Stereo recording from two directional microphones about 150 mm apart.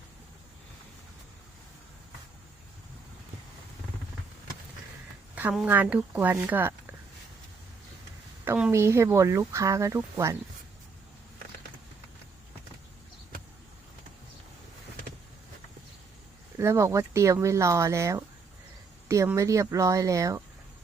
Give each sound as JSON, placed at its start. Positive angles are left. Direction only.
{"t": 5.3, "sound": "speech", "side_deg": -10}
{"t": 8.4, "sound": "a woman's voice", "side_deg": -5}
{"t": 8.7, "sound": "speech", "side_deg": -20}
{"t": 16.6, "sound": "speech", "side_deg": -20}